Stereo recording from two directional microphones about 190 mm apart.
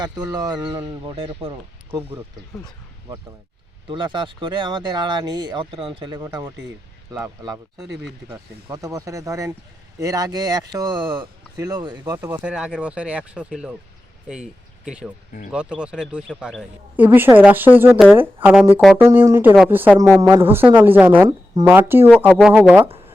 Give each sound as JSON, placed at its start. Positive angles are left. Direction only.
{"t": 0.0, "sound": "speech", "side_deg": -20}
{"t": 3.8, "sound": "speech", "side_deg": -25}
{"t": 14.8, "sound": "speech", "side_deg": -5}
{"t": 21.2, "sound": "speech", "side_deg": -20}